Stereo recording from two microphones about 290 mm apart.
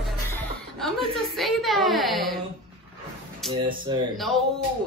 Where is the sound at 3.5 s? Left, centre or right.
Centre.